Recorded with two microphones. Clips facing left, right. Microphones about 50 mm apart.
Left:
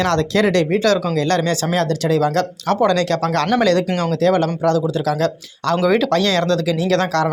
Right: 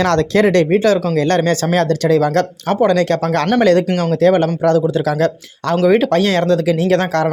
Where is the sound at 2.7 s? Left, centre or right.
Centre.